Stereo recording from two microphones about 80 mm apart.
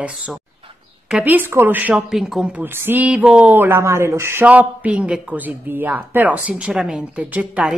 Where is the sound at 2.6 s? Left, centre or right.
Right.